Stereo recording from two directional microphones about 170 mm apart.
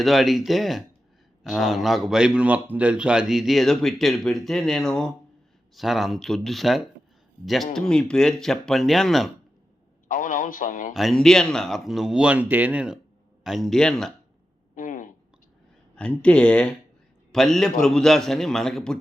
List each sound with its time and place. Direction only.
0.0 s a man's voice: centre (ahead or behind)
10.1 s a man's voice: 50° left (ahead or behind)
10.9 s a man's voice: centre (ahead or behind)
14.8 s a sound: 50° left (ahead or behind)
16.0 s a man's voice: 5° left (ahead or behind)